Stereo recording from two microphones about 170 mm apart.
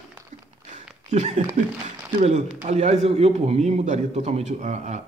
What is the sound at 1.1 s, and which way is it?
A man's voice, 40° right (ahead or behind).